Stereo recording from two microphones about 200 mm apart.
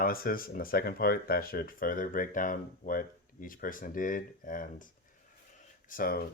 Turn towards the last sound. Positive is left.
turn(degrees=45)  # may be behind; listen again after turning